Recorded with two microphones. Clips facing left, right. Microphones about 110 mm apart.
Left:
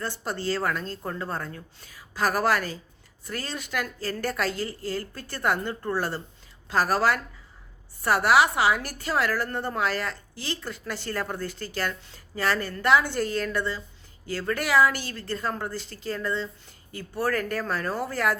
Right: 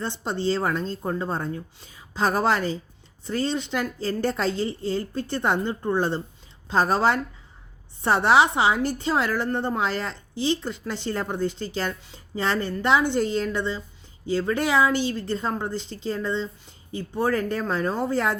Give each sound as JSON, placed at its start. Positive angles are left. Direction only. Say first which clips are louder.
{"t": 0.0, "sound": "a woman's voice", "louder": "right 4 dB", "side_deg": -20}